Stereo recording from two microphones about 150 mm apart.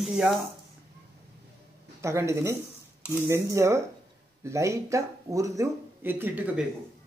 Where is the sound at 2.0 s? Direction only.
20° right (ahead or behind).